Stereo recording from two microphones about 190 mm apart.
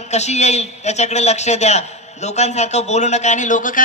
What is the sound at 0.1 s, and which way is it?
A man's voice, 35° left (ahead or behind).